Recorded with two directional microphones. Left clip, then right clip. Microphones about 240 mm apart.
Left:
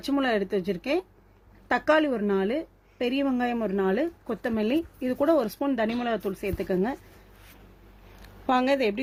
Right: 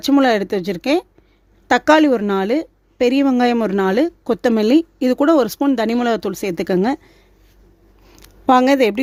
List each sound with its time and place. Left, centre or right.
0.0 s a woman's voice: right
8.2 s a woman's voice: right